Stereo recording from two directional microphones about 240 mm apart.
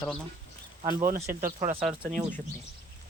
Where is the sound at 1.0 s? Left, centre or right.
Right.